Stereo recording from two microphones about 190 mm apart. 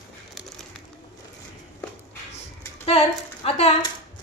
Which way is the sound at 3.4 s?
35° left (ahead or behind).